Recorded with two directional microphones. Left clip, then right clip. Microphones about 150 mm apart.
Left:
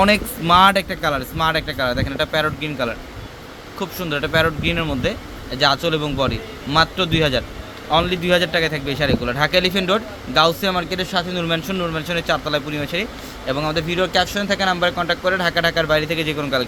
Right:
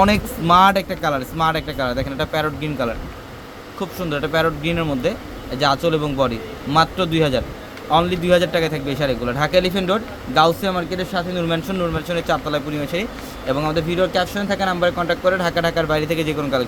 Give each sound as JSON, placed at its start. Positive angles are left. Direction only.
{"t": 0.0, "sound": "a man's voice", "side_deg": 5}